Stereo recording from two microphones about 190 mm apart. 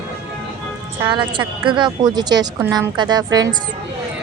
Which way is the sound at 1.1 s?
25° right (ahead or behind).